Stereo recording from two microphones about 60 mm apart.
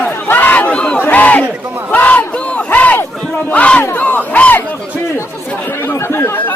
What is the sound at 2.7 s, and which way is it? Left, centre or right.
Crowd, left.